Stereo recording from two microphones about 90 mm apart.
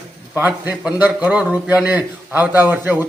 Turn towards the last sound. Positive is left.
turn(degrees=-20)  # may be behind; listen again after turning